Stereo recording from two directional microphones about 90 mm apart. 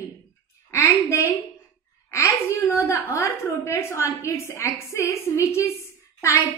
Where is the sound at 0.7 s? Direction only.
30° left (ahead or behind).